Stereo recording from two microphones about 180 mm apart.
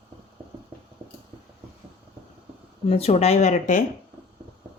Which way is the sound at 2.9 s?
35° left (ahead or behind).